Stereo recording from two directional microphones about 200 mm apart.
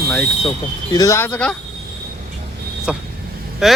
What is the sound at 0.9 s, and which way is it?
Speech, 15° left (ahead or behind).